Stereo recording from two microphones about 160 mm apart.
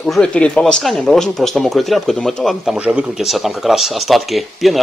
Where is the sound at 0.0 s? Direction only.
5° left (ahead or behind).